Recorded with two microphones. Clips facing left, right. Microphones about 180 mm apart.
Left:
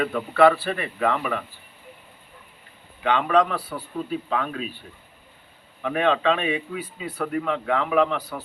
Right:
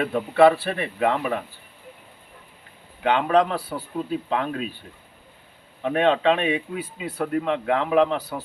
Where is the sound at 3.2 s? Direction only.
25° right (ahead or behind).